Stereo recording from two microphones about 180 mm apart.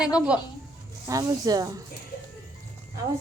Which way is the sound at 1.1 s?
20° right (ahead or behind).